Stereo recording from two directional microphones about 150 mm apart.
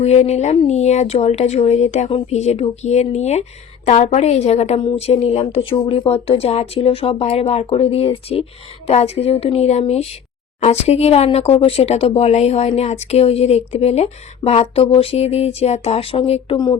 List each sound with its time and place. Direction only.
0.0 s speech: 45° left (ahead or behind)